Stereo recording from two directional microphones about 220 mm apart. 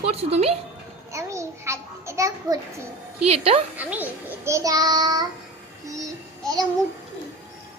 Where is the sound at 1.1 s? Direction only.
15° right (ahead or behind).